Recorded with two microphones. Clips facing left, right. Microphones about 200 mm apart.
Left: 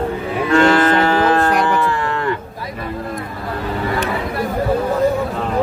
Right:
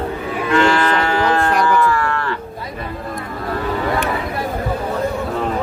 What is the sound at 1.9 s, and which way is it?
Cattle, 20° left (ahead or behind).